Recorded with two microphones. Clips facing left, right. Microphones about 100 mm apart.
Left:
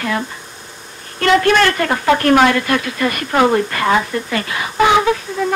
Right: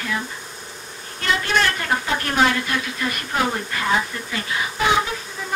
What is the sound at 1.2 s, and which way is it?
Speech, 70° left (ahead or behind).